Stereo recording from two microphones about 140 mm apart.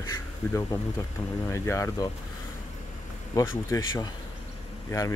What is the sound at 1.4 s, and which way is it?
Speech, 20° left (ahead or behind).